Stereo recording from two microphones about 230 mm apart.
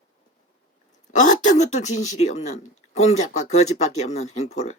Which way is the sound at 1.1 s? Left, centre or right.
Left.